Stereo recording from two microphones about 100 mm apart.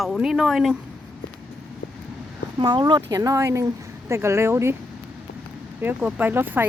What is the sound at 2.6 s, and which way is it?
Speech, 45° right (ahead or behind).